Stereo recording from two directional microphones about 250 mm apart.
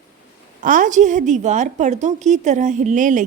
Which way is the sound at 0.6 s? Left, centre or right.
Right.